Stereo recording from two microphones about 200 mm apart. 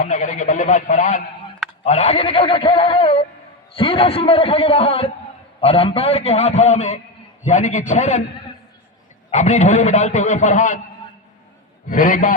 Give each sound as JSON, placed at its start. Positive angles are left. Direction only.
{"t": 0.0, "sound": "a man's voice", "side_deg": 40}
{"t": 9.3, "sound": "a man's voice", "side_deg": 35}
{"t": 11.9, "sound": "a man's voice", "side_deg": 45}